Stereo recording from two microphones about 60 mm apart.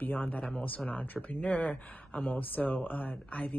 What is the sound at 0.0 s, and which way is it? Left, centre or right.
Speech, left.